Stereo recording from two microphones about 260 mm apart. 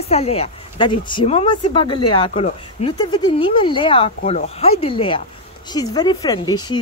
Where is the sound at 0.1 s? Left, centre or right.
Left.